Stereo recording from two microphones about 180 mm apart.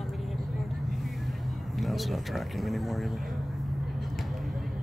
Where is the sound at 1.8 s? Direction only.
Centre (ahead or behind).